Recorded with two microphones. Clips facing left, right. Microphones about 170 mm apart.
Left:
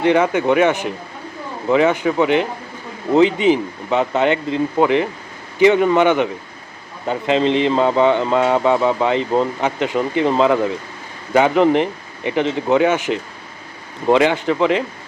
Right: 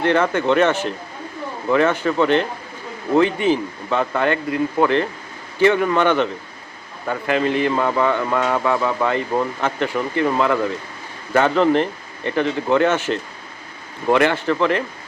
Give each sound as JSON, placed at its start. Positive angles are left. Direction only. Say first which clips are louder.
{"t": 0.0, "sound": "speech", "louder": "left 3 dB", "side_deg": 15}